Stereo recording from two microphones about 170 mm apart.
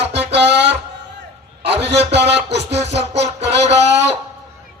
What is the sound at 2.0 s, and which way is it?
Music, 90° right.